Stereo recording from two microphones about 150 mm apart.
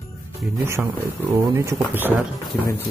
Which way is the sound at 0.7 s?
20° right (ahead or behind).